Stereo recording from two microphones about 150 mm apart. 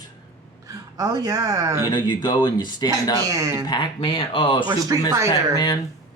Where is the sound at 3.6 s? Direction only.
30° left (ahead or behind).